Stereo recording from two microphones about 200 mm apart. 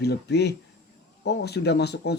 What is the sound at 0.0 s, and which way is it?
Speech, 55° left (ahead or behind).